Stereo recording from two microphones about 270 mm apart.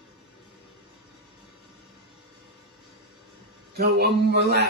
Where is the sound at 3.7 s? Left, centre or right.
Right.